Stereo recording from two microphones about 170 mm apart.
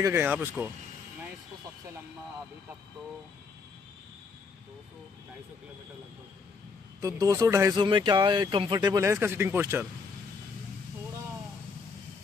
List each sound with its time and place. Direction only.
0.0 s speech: 15° right (ahead or behind)
7.0 s speech: 20° right (ahead or behind)